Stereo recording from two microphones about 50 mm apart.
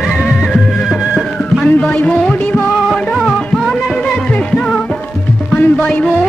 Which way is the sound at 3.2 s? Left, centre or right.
Centre.